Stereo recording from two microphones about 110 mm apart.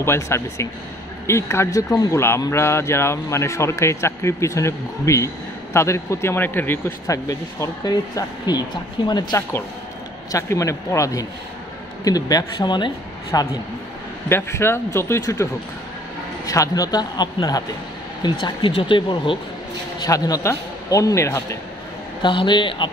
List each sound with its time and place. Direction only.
0.0 s speech: 25° left (ahead or behind)
7.1 s speech: 30° left (ahead or behind)
13.3 s speech: 30° left (ahead or behind)
16.4 s speech: 30° left (ahead or behind)
18.2 s speech: 45° left (ahead or behind)
20.1 s speech: 30° left (ahead or behind)
22.2 s speech: 45° left (ahead or behind)